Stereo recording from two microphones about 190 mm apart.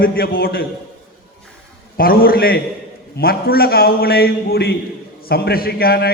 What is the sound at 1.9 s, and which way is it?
A man's voice, 50° left (ahead or behind).